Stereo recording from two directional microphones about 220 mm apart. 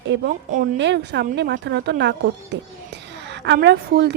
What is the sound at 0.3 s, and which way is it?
Speech, 40° right (ahead or behind).